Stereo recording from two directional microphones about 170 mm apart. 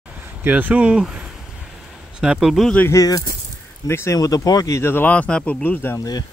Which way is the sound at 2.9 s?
20° left (ahead or behind).